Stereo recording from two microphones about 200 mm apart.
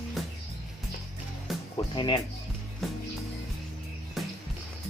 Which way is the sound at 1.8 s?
25° left (ahead or behind).